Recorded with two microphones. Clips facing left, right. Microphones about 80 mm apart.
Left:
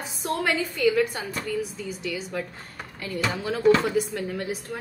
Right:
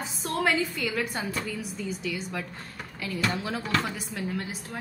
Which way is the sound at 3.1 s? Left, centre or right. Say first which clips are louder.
Left 1 dB; centre.